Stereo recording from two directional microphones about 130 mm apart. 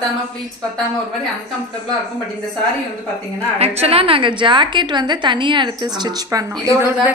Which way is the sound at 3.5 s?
50° right (ahead or behind).